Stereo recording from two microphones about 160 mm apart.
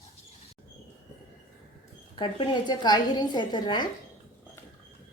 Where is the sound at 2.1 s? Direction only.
30° left (ahead or behind).